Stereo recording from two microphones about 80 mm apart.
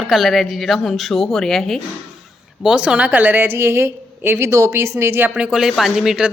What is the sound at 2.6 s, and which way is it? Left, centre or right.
Speech, centre.